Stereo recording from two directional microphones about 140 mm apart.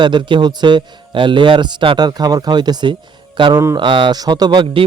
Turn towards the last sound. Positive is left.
turn(degrees=-35)  # may be behind; listen again after turning